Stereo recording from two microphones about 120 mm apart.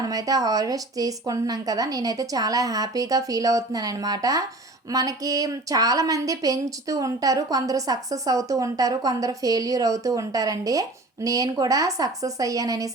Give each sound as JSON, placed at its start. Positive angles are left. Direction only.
{"t": 0.0, "sound": "speech", "side_deg": -30}